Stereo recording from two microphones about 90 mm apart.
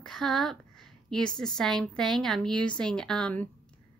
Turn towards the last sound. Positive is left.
turn(degrees=10)  # may be behind; listen again after turning